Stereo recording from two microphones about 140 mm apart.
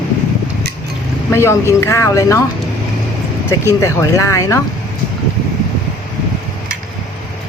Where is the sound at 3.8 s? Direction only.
20° left (ahead or behind).